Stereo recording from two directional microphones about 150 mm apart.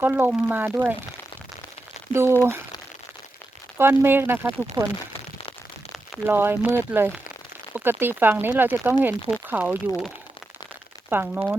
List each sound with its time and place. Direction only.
0.0 s speech: 10° right (ahead or behind)
2.1 s speech: 15° right (ahead or behind)
3.8 s speech: 15° right (ahead or behind)
4.8 s speech: 35° right (ahead or behind)
6.2 s speech: 15° right (ahead or behind)
11.1 s speech: 10° right (ahead or behind)